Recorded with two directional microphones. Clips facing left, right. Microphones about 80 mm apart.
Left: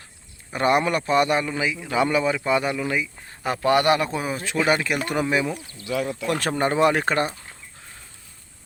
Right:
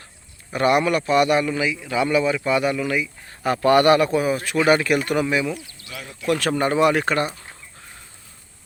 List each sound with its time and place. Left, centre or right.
0.5 s a man's voice: left
2.3 s a man's voice: left
4.5 s speech: centre
5.0 s a man's voice: left